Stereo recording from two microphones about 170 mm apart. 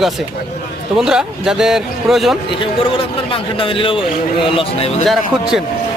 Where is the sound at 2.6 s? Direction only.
30° left (ahead or behind).